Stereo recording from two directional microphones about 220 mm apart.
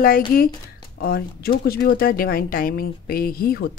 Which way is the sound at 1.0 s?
45° left (ahead or behind).